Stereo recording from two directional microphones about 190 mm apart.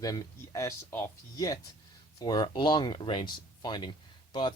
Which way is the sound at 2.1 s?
20° left (ahead or behind).